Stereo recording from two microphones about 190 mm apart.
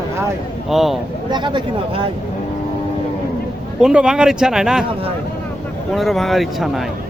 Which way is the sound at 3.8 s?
5° right (ahead or behind).